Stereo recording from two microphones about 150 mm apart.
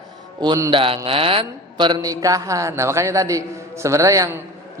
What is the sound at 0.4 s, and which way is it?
Speech, 30° right (ahead or behind).